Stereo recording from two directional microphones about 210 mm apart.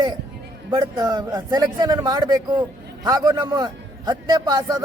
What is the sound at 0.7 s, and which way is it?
A man's voice, 20° right (ahead or behind).